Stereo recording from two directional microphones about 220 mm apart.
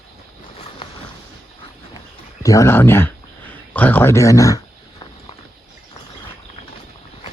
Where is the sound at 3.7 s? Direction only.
10° left (ahead or behind).